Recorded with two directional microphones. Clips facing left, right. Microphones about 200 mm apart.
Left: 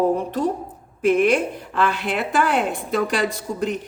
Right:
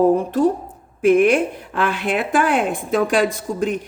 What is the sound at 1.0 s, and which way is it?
A woman's voice, 50° right (ahead or behind).